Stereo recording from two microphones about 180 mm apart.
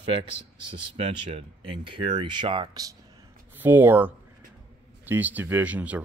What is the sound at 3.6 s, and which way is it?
A man's voice, 10° right (ahead or behind).